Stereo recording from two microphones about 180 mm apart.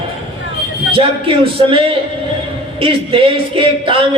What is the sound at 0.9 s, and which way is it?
Speech, 30° right (ahead or behind).